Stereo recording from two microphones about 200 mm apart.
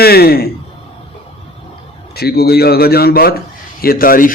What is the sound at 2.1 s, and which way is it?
A man's voice, 50° left (ahead or behind).